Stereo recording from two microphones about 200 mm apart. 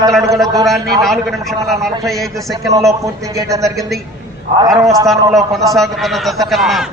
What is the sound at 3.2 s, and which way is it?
Speech, 15° right (ahead or behind).